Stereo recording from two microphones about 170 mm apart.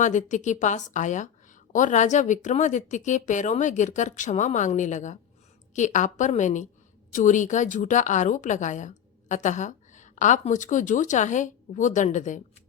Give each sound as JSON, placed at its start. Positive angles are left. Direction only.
{"t": 0.0, "sound": "a woman's voice", "side_deg": 45}